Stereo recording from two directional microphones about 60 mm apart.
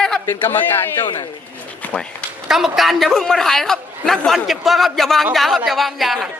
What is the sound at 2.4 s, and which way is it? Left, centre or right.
A man's voice, centre.